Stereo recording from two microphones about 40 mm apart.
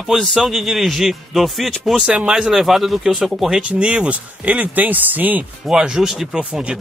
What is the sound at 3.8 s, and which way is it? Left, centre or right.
Speech, right.